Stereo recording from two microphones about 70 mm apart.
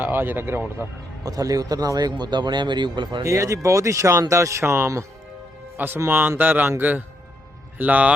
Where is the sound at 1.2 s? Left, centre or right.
Right.